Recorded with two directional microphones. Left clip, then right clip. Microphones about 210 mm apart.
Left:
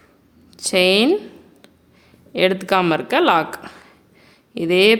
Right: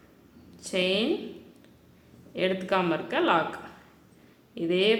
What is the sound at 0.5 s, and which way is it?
Speech, 50° left (ahead or behind).